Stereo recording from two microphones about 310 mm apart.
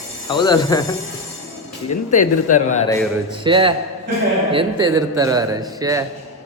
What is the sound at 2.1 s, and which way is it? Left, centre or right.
Speech, left.